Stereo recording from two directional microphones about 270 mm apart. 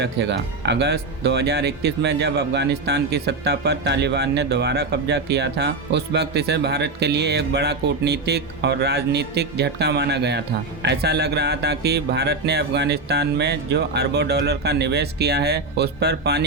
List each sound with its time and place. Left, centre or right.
0.0 s speech: right